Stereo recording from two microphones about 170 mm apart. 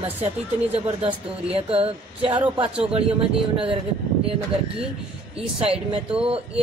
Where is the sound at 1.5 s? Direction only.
35° right (ahead or behind).